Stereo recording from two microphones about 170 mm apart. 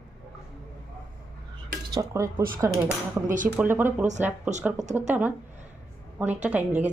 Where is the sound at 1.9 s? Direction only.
20° right (ahead or behind).